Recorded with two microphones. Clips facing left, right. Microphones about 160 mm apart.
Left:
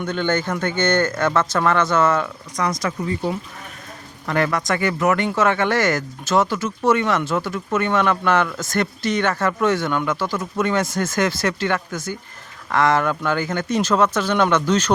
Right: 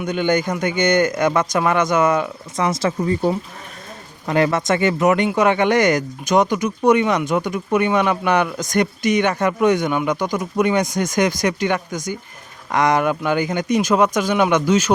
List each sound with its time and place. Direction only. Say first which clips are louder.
0.0 s speech: right 3 dB; 15° right (ahead or behind)
2.6 s speech: right 3 dB; 25° right (ahead or behind)
4.3 s speech: right 3 dB; 20° right (ahead or behind)